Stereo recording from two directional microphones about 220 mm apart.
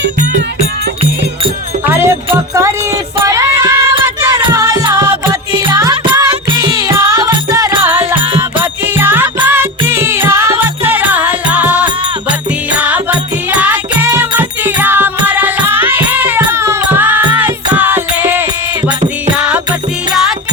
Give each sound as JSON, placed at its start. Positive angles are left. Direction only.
{"t": 1.9, "sound": "music", "side_deg": -10}
{"t": 13.6, "sound": "music", "side_deg": -5}